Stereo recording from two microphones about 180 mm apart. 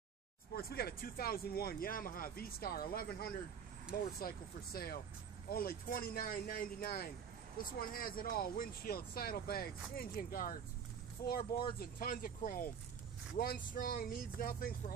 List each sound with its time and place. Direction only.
0.6 s speech: 60° left (ahead or behind)